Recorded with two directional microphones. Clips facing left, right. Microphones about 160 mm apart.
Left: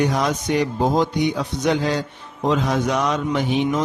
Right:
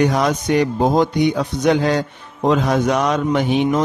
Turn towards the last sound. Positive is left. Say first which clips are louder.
# right 4 dB
turn(degrees=-60)  # may be behind; listen again after turning